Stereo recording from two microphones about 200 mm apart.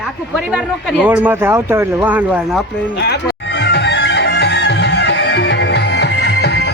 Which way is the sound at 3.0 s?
55° left (ahead or behind).